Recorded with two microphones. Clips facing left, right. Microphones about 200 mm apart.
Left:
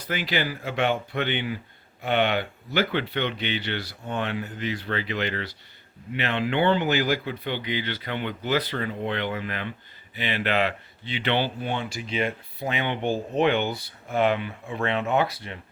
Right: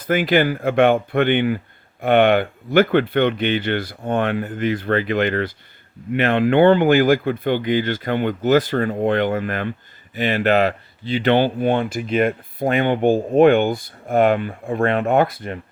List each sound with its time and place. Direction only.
0.0 s speech: 50° right (ahead or behind)